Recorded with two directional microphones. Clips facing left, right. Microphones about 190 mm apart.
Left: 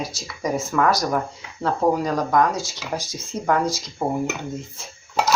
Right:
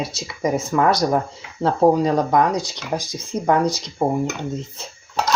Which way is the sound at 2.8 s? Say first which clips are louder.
Right 3 dB; 15° right (ahead or behind).